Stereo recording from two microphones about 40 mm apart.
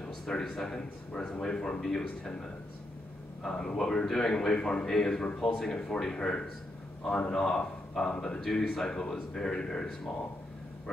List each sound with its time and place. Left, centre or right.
0.0 s speech: centre
3.4 s speech: centre
5.2 s speech: left